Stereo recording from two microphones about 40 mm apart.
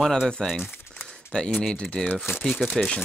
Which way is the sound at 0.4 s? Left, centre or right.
Centre.